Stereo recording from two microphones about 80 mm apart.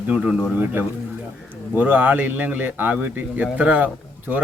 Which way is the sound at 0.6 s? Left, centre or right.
Right.